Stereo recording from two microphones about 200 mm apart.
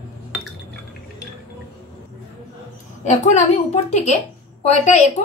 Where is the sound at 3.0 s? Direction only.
35° left (ahead or behind).